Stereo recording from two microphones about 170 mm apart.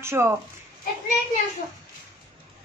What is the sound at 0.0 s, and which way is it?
Speech, 15° right (ahead or behind).